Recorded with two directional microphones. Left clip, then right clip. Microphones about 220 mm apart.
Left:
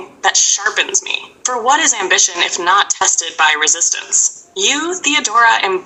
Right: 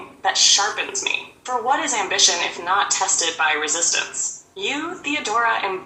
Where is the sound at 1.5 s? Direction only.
40° left (ahead or behind).